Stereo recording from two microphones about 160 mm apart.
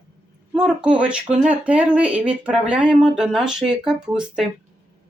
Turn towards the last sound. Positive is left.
turn(degrees=-5)  # may be behind; listen again after turning